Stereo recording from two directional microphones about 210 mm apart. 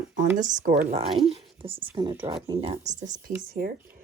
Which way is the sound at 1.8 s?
15° right (ahead or behind).